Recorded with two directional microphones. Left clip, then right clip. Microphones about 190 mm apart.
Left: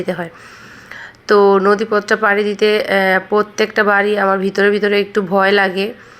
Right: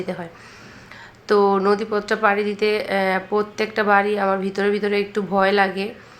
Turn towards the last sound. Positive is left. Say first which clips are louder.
# left 5 dB
turn(degrees=25)  # may be behind; listen again after turning